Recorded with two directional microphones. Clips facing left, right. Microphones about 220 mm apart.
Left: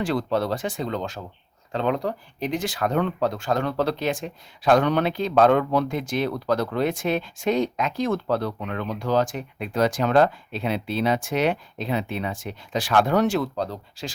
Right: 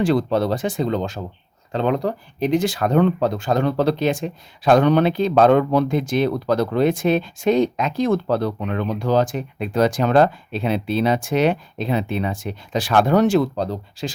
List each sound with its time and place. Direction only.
0.0 s speech: 25° right (ahead or behind)
1.7 s speech: 35° right (ahead or behind)